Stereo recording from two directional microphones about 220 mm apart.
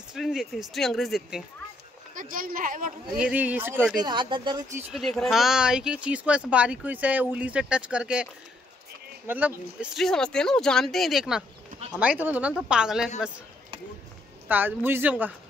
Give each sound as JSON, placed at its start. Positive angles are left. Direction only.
{"t": 0.1, "sound": "speech", "side_deg": 0}
{"t": 2.1, "sound": "speech", "side_deg": -40}
{"t": 3.2, "sound": "speech", "side_deg": -5}
{"t": 4.0, "sound": "speech", "side_deg": -20}
{"t": 4.9, "sound": "speech", "side_deg": 0}
{"t": 9.3, "sound": "speech", "side_deg": -10}
{"t": 14.5, "sound": "speech", "side_deg": -10}